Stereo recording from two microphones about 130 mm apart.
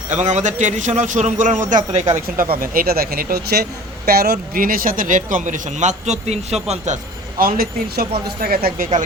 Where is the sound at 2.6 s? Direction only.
90° right.